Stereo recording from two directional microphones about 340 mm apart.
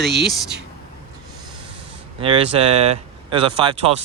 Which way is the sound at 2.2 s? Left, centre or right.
Centre.